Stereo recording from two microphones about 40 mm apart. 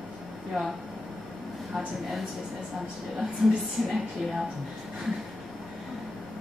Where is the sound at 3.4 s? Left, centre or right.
Centre.